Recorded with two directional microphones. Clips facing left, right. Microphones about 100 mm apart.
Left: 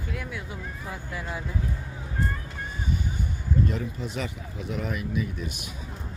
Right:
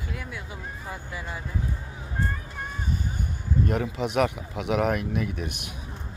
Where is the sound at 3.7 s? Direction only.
70° right (ahead or behind).